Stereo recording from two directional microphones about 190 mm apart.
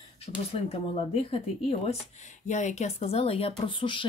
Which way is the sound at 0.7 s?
30° left (ahead or behind).